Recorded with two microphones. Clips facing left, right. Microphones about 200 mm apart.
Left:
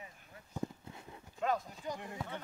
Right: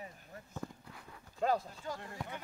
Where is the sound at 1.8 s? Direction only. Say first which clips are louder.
Left 1 dB; 15° left (ahead or behind).